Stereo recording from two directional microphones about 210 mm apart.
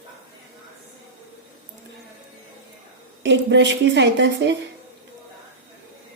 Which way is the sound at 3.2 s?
55° right (ahead or behind).